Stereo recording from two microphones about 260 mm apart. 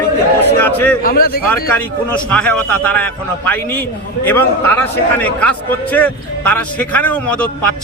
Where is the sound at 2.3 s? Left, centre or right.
Centre.